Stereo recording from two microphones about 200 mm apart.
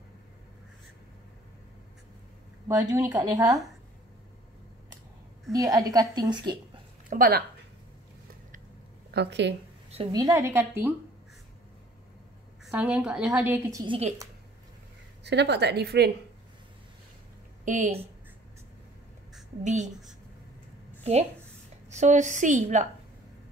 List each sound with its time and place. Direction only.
2.9 s a woman's voice: 15° right (ahead or behind)
5.5 s a woman's voice: 15° right (ahead or behind)
7.1 s speech: 45° right (ahead or behind)
9.1 s a woman's voice: 60° right (ahead or behind)
10.1 s a woman's voice: 15° right (ahead or behind)
12.7 s a woman's voice: 5° right (ahead or behind)
15.2 s a woman's voice: 60° right (ahead or behind)
17.6 s a woman's voice: 40° right (ahead or behind)
19.6 s a woman's voice: 35° right (ahead or behind)
21.0 s a woman's voice: 30° right (ahead or behind)